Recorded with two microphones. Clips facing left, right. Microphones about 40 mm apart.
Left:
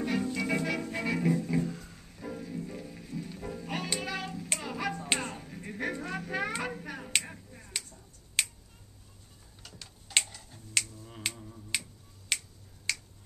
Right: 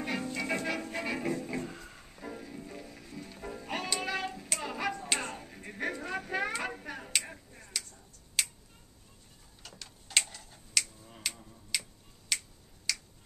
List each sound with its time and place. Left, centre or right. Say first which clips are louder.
0.0 s music: left 3 dB; centre
4.0 s hands: right 1 dB; centre
4.6 s music: right 2 dB; centre
5.2 s a sound: left 1 dB; centre
6.6 s hands: left 1 dB; centre
7.2 s finger snapping: left 1 dB; centre
9.6 s tick-tock: right 1 dB; centre
10.2 s computer keyboard: even; centre
11.3 s finger snapping: left 3 dB; left
12.9 s tick-tock: left 2 dB; left